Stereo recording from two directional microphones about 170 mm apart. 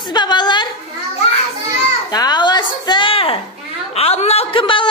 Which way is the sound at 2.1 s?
25° left (ahead or behind).